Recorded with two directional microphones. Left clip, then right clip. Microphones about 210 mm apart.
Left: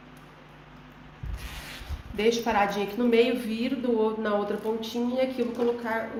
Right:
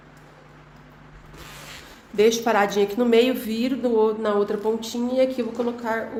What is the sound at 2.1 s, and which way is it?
A woman's voice, 60° right (ahead or behind).